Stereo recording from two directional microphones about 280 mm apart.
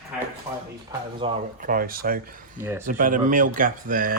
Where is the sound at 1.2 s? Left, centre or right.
Right.